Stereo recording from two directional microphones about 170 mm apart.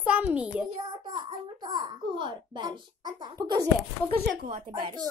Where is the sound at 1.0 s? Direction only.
25° right (ahead or behind).